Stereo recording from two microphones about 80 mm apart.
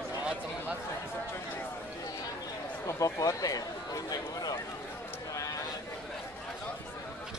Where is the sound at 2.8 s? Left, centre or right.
Left.